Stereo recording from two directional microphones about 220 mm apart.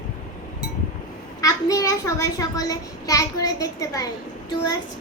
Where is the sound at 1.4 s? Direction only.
15° left (ahead or behind).